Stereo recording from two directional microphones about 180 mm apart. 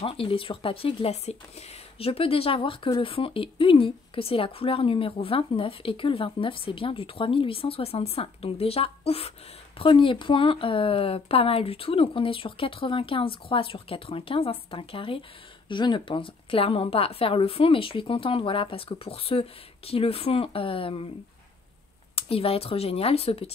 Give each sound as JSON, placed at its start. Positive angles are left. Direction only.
{"t": 0.0, "sound": "speech", "side_deg": 30}
{"t": 22.1, "sound": "speech", "side_deg": 30}